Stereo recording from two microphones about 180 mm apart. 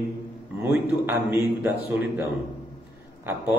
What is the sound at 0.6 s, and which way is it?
A man's voice, 15° right (ahead or behind).